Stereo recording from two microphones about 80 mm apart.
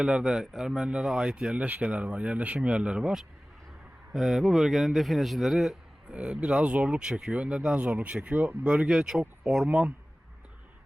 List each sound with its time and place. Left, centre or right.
0.0 s a man's voice: centre